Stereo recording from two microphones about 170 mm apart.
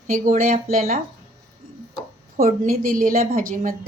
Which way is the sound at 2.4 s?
55° right (ahead or behind).